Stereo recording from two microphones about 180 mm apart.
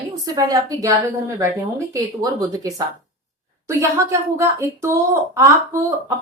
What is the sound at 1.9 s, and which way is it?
A woman's voice, 20° right (ahead or behind).